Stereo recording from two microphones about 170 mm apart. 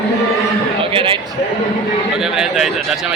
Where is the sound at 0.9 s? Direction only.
30° right (ahead or behind).